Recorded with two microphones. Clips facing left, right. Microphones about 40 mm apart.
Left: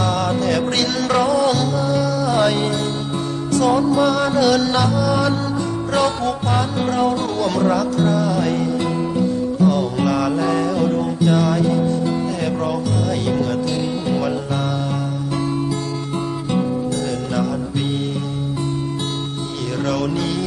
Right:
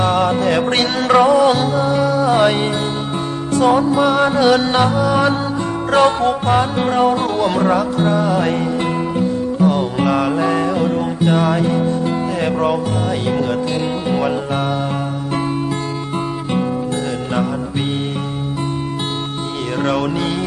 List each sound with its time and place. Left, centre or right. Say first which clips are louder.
0.0 s music: right 4 dB; right
19.8 s music: right 3 dB; right